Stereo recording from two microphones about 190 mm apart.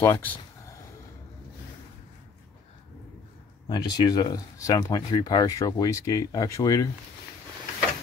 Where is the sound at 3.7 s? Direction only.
25° left (ahead or behind).